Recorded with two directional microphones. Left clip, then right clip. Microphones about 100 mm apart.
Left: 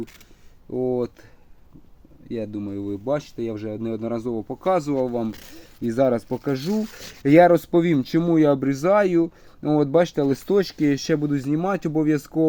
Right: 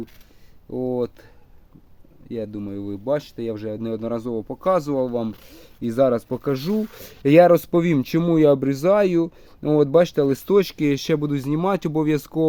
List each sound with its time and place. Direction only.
0.7 s speech: 15° right (ahead or behind)
2.3 s speech: centre (ahead or behind)
6.2 s speech: 35° right (ahead or behind)